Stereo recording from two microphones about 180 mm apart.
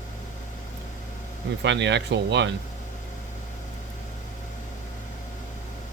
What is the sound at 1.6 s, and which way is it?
Speech, 85° right.